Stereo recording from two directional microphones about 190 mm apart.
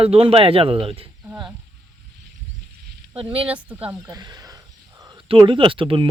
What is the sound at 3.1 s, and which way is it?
Speech, 30° right (ahead or behind).